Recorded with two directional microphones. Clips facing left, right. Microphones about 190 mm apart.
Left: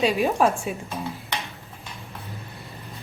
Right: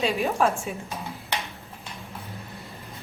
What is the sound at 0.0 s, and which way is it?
Speech, 15° left (ahead or behind).